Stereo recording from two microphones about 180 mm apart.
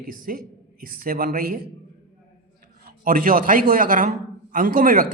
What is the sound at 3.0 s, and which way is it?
A man's voice, 50° right (ahead or behind).